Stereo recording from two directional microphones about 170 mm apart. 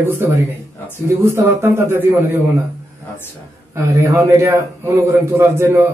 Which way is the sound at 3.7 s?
15° right (ahead or behind).